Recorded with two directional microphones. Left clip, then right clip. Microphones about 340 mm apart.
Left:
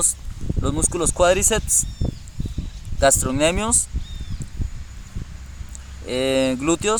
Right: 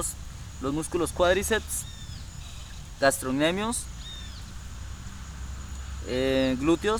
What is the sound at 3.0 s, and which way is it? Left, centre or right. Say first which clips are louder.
Speech: left 6 dB; centre.